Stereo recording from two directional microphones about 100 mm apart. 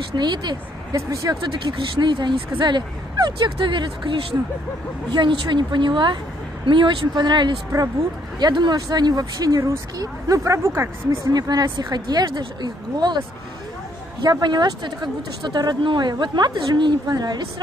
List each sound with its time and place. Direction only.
0.1 s speech: 50° right (ahead or behind)
0.9 s speech: 35° right (ahead or behind)
1.4 s speech: 50° right (ahead or behind); by 11.1 s 25° right (ahead or behind)
11.3 s speech: 40° right (ahead or behind)
14.2 s speech: 45° right (ahead or behind)